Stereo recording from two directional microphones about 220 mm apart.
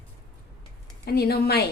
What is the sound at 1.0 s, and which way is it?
Speech, 45° left (ahead or behind).